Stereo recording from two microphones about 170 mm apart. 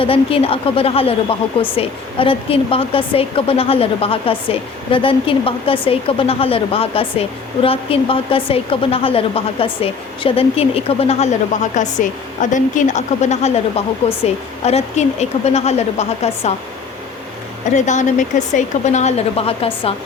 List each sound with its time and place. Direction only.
0.0 s speech: 35° left (ahead or behind)
17.7 s speech: 45° left (ahead or behind)